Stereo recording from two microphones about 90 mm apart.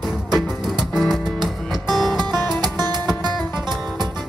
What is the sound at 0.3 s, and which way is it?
Music, 5° right (ahead or behind).